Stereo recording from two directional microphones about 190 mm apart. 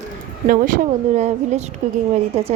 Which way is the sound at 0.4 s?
50° right (ahead or behind).